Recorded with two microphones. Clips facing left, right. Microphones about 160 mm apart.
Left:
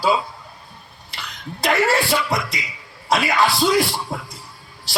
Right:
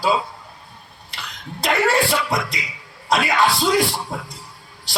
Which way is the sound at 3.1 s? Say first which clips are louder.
Even; centre (ahead or behind).